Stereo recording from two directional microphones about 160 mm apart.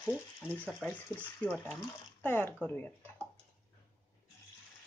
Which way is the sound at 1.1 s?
5° left (ahead or behind).